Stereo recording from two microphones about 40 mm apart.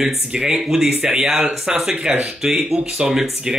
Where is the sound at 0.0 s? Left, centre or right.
Centre.